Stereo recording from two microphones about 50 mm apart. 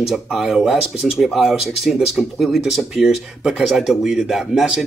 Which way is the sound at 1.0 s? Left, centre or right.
Centre.